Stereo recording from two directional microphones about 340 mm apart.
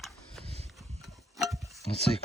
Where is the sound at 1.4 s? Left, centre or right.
Centre.